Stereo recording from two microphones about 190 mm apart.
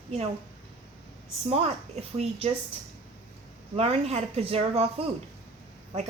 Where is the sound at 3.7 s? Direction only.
30° right (ahead or behind).